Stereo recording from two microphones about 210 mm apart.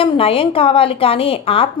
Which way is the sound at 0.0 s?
25° left (ahead or behind).